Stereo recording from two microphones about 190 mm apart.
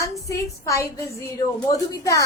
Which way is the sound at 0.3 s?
15° left (ahead or behind).